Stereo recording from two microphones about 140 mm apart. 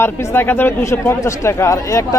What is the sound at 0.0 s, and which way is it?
Speech, 20° left (ahead or behind).